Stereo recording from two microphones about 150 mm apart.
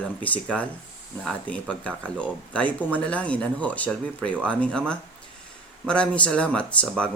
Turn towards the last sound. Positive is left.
turn(degrees=5)  # may be behind; listen again after turning